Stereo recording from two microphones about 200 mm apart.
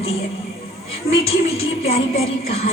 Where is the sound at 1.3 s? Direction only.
30° left (ahead or behind).